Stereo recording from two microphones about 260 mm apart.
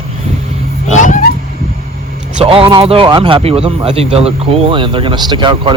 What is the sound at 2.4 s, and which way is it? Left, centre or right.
Speech, centre.